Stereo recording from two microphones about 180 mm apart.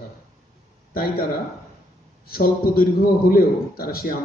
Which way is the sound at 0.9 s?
55° left (ahead or behind).